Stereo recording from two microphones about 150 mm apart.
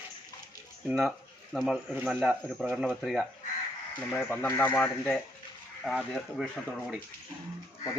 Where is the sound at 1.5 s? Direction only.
Centre (ahead or behind).